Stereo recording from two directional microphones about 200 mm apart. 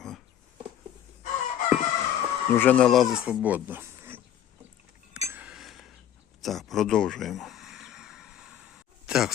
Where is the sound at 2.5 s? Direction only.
5° left (ahead or behind); by 4.2 s 10° right (ahead or behind).